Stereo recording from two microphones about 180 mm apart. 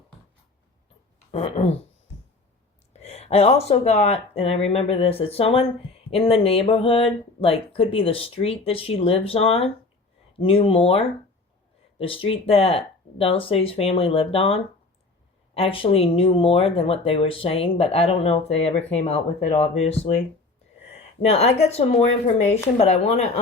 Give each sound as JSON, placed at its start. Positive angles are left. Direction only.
{"t": 1.3, "sound": "speech", "side_deg": 35}
{"t": 2.9, "sound": "speech", "side_deg": 35}
{"t": 22.4, "sound": "speech", "side_deg": 10}
{"t": 22.8, "sound": "speech", "side_deg": 35}